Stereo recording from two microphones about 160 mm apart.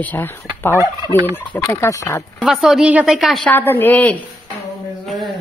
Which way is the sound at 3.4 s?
10° left (ahead or behind).